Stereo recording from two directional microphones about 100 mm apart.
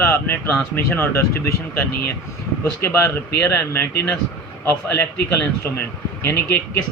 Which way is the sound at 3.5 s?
20° left (ahead or behind).